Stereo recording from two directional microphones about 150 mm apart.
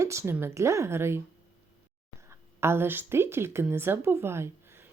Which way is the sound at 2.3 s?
15° right (ahead or behind).